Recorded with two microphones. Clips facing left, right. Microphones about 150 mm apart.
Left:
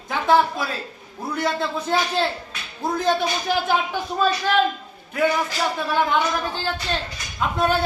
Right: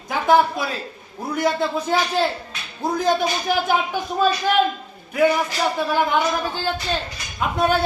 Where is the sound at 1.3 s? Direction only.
15° right (ahead or behind).